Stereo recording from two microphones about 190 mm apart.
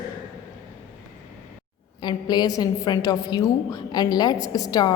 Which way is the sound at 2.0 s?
20° left (ahead or behind).